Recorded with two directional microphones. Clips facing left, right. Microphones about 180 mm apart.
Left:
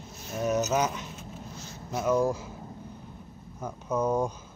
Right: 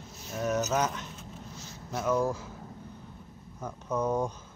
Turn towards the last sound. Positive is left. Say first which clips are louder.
# left 2 dB
turn(degrees=10)  # may be behind; listen again after turning